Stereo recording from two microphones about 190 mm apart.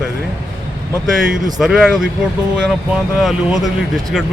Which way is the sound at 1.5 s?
Centre (ahead or behind).